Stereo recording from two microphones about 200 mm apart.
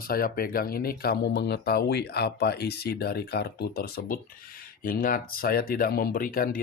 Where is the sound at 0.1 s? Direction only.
45° left (ahead or behind).